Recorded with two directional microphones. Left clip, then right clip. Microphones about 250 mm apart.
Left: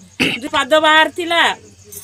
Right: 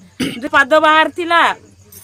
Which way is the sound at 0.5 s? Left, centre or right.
Right.